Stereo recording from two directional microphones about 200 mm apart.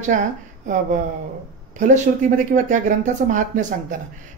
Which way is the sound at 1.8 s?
40° right (ahead or behind).